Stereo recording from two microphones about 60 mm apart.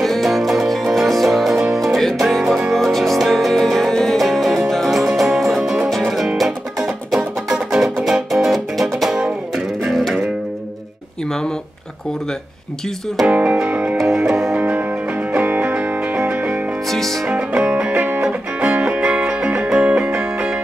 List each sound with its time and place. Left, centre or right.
0.0 s music: centre
13.3 s music: right
13.9 s music: centre
14.6 s music: right
16.9 s music: centre
17.3 s music: centre